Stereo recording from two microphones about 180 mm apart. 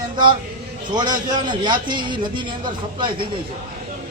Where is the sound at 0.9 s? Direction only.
25° right (ahead or behind).